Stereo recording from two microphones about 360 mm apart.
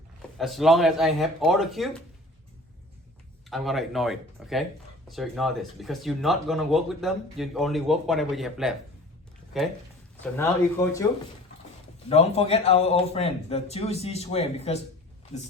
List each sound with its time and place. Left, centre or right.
0.2 s speech: centre
3.5 s a man's voice: centre